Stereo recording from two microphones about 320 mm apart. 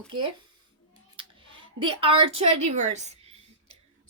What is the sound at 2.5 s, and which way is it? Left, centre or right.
Speech, right.